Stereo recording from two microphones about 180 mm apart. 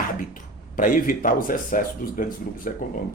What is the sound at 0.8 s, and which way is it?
Speech, 50° left (ahead or behind).